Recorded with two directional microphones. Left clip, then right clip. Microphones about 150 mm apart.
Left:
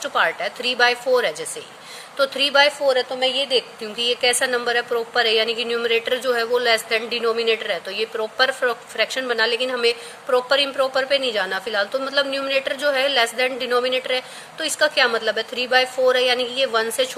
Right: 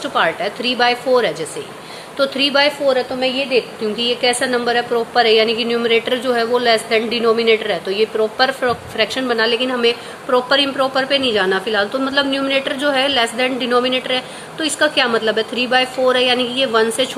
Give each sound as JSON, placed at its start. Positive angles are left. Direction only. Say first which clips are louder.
{"t": 0.0, "sound": "a woman's voice", "louder": "right 3 dB", "side_deg": 40}